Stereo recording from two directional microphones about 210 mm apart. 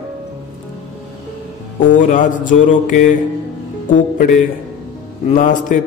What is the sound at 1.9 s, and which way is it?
A man's voice, 40° left (ahead or behind).